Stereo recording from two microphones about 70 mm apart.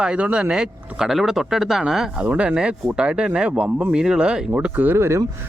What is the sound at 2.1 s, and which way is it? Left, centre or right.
Speech, centre.